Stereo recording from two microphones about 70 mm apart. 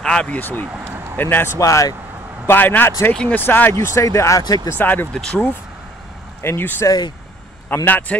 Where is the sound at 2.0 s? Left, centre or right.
Right.